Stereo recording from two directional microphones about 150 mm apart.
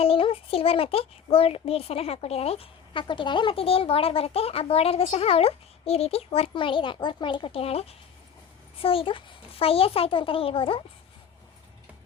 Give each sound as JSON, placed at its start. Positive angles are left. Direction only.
{"t": 0.0, "sound": "a child's voice", "side_deg": 40}